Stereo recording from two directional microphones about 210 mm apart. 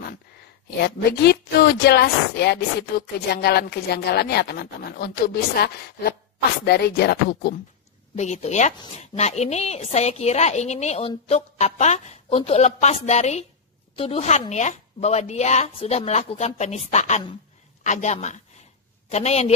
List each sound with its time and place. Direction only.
0.8 s a woman's voice: 50° left (ahead or behind)
8.2 s a woman's voice: 35° left (ahead or behind)